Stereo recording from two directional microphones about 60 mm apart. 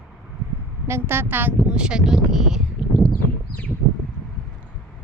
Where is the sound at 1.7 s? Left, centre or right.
Centre.